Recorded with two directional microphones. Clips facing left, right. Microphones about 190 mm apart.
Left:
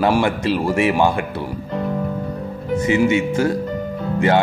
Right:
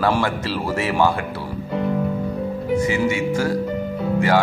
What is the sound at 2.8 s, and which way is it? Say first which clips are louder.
Speech: left 7 dB; 20° left (ahead or behind).